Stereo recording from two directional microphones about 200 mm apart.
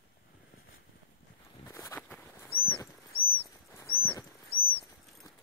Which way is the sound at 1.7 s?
15° left (ahead or behind).